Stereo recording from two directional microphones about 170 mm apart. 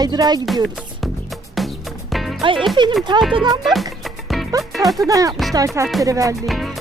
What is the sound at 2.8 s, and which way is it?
Speech, 25° right (ahead or behind).